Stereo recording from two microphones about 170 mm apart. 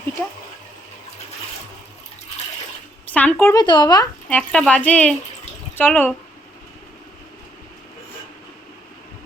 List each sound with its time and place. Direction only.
3.1 s speech: 10° left (ahead or behind)
3.5 s speech: 25° left (ahead or behind)
4.3 s speech: 5° left (ahead or behind)